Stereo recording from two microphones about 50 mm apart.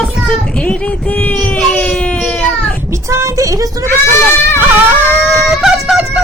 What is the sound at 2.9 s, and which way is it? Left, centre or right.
Vehicle, right.